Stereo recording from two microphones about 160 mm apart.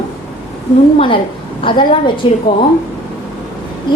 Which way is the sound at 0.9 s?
35° left (ahead or behind).